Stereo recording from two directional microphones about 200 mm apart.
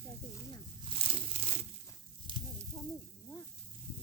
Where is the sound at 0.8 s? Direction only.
25° right (ahead or behind).